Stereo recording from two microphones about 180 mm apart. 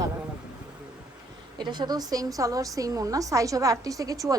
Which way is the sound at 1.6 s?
25° right (ahead or behind).